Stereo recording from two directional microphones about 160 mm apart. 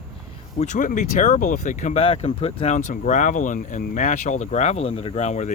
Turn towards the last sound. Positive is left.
turn(degrees=45)  # may be behind; listen again after turning